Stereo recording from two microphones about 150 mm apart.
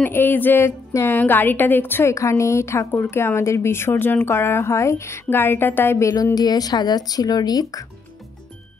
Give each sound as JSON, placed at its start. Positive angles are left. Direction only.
{"t": 0.0, "sound": "a woman's voice", "side_deg": 10}